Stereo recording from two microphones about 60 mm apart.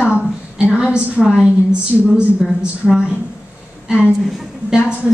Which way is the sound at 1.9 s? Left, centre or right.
Centre.